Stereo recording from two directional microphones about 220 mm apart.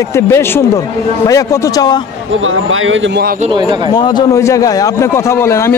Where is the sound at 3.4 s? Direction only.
20° right (ahead or behind).